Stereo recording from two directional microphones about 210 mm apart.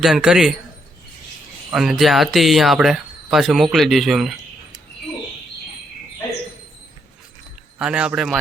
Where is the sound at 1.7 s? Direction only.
Centre (ahead or behind).